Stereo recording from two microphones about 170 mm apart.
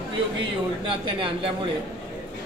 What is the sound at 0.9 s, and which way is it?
Speech, 30° right (ahead or behind).